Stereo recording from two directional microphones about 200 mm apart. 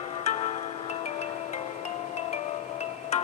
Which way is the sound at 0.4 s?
35° left (ahead or behind).